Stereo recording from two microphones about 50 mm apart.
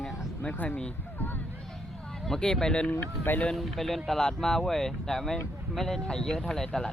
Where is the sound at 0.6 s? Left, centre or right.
Left.